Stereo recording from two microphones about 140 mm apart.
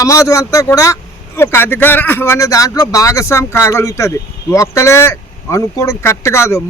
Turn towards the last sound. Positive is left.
turn(degrees=20)  # may be behind; listen again after turning